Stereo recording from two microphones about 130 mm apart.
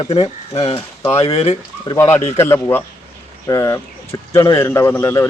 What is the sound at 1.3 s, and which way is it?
Speech, 50° left (ahead or behind).